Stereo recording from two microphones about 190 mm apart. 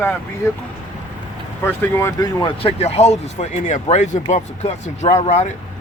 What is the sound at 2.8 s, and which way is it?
Speech, 35° left (ahead or behind).